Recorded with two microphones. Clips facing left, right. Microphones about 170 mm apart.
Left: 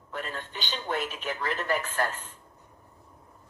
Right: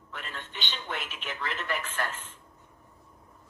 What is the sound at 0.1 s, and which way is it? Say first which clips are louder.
Speech: left 5 dB; 40° left (ahead or behind).